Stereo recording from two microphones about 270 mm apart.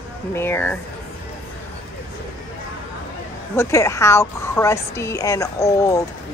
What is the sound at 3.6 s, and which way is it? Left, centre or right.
A woman's voice, centre.